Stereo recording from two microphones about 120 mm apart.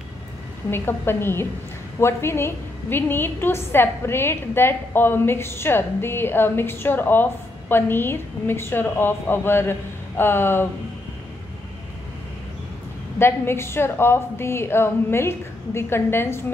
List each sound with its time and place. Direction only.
0.7 s a woman's voice: 20° left (ahead or behind)
13.2 s a woman's voice: 20° left (ahead or behind)